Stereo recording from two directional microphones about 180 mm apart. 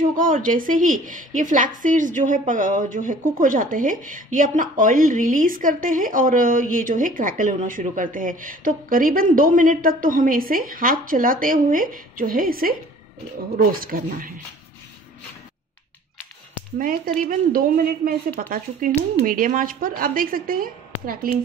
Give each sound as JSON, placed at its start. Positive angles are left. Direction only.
{"t": 0.1, "sound": "a woman's voice", "side_deg": -50}
{"t": 16.7, "sound": "a woman's voice", "side_deg": -50}